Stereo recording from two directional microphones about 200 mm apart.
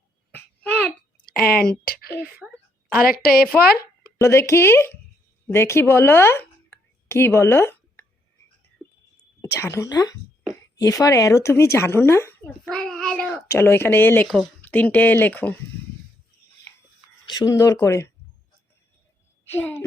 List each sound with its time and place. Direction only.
0.3 s babbling: 10° left (ahead or behind)
1.2 s a sound: 50° left (ahead or behind)
1.8 s a woman's voice: 50° left (ahead or behind)
2.4 s a child's voice: centre (ahead or behind)
3.6 s a sound: 50° left (ahead or behind)
4.2 s speech: 15° left (ahead or behind)
8.8 s a sound: 5° right (ahead or behind)
9.4 s a child's voice: 15° left (ahead or behind)
17.2 s speech: 20° left (ahead or behind)
19.5 s speech: 10° left (ahead or behind)